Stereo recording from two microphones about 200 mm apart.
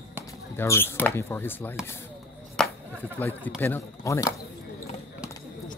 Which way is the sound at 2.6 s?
5° left (ahead or behind).